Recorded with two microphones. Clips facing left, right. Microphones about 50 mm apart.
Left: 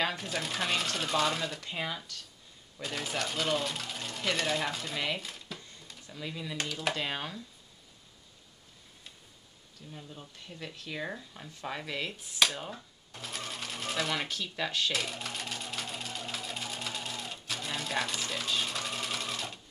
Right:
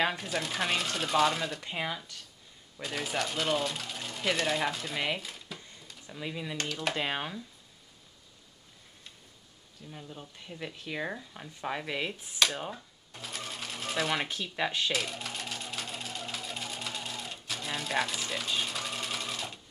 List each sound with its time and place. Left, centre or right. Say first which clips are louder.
0.2 s speech: right 1 dB; centre
1.6 s speech: right 1 dB; centre
2.8 s speech: right 2 dB; centre
5.0 s a sound: right 1 dB; centre
6.0 s speech: right 2 dB; centre
6.5 s speech: left 1 dB; centre
7.0 s speech: right 2 dB; centre
9.8 s speech: right 2 dB; centre
12.5 s speech: right 3 dB; centre
14.9 s sewing machine: right 1 dB; centre